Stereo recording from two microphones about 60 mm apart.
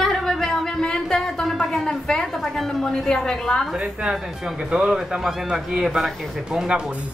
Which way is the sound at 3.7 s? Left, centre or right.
Centre.